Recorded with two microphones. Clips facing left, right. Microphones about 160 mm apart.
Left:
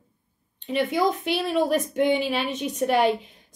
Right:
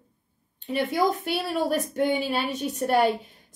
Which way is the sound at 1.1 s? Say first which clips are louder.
Left 2 dB; centre (ahead or behind).